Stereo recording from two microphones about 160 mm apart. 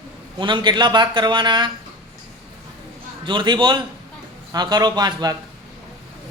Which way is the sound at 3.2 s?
30° right (ahead or behind).